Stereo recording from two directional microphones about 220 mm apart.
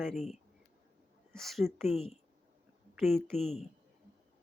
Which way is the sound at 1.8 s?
30° left (ahead or behind).